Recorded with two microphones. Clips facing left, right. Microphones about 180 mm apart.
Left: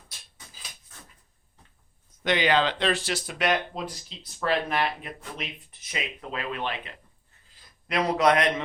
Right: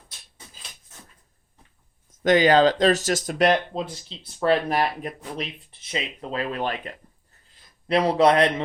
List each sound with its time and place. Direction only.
2.0 s speech: 45° right (ahead or behind)